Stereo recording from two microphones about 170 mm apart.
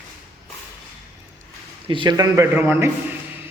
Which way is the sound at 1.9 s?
25° right (ahead or behind).